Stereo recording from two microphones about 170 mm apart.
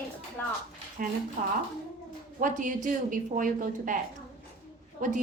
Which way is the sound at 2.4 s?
50° right (ahead or behind).